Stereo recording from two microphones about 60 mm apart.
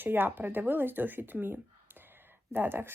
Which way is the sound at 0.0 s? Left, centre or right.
Right.